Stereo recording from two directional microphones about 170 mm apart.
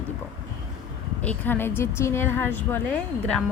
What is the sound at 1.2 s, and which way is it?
A woman's voice, 10° left (ahead or behind).